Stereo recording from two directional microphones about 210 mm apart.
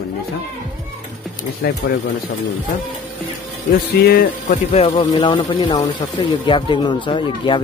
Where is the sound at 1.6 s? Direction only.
55° left (ahead or behind).